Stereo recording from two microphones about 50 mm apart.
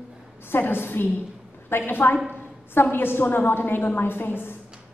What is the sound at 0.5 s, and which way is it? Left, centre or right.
A woman's voice, left.